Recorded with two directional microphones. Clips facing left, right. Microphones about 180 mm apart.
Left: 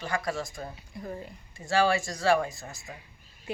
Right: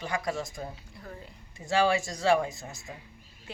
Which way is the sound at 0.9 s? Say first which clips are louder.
Left 7 dB; 15° left (ahead or behind).